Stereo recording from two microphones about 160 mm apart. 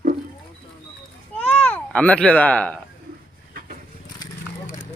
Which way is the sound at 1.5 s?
10° left (ahead or behind).